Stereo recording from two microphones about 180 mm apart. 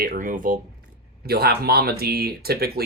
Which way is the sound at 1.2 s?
60° right (ahead or behind).